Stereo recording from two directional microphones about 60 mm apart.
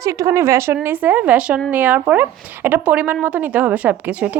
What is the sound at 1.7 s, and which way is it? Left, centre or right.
A woman's voice, right.